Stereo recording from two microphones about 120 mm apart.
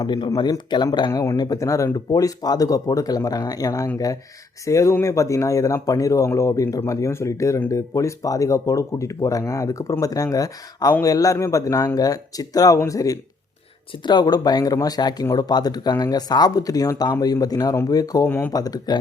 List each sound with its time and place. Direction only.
0.0 s speech: 35° left (ahead or behind)
18.3 s speech: 15° left (ahead or behind)
18.5 s speech: 30° left (ahead or behind)